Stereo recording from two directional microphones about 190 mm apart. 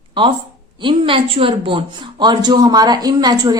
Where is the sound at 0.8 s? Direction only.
25° right (ahead or behind).